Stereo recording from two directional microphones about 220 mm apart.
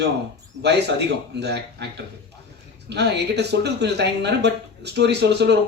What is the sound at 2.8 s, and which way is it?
A man's voice, 50° right (ahead or behind).